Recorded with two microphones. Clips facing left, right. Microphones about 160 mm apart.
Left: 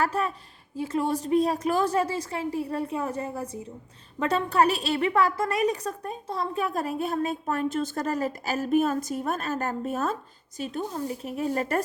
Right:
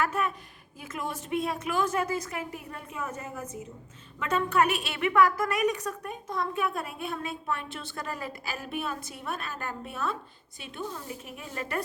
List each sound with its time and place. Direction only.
0.0 s a woman's voice: 35° left (ahead or behind)